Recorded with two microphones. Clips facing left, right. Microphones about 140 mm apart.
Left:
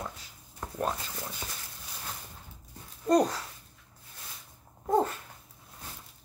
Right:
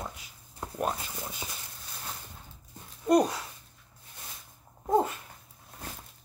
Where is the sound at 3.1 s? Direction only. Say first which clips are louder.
Right 1 dB; 10° right (ahead or behind).